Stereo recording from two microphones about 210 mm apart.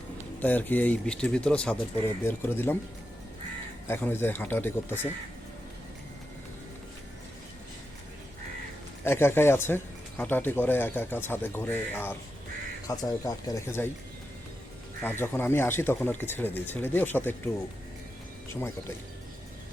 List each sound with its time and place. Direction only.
0.4 s speech: 10° left (ahead or behind)
3.8 s speech: 10° left (ahead or behind)
9.0 s speech: 10° left (ahead or behind)
15.0 s speech: 10° left (ahead or behind)